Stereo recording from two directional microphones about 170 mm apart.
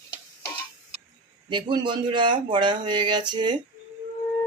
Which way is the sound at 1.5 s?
25° right (ahead or behind).